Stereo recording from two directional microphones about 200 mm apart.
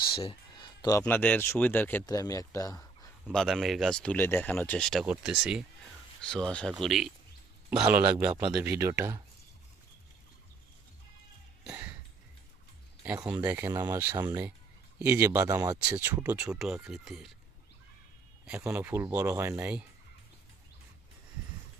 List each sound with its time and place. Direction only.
0.0 s a sound: 25° left (ahead or behind)
1.0 s speech: 5° left (ahead or behind)
3.2 s speech: centre (ahead or behind)
11.6 s a sound: 5° right (ahead or behind)
13.0 s speech: 10° right (ahead or behind)
15.8 s speech: 10° right (ahead or behind)
18.6 s speech: 10° right (ahead or behind)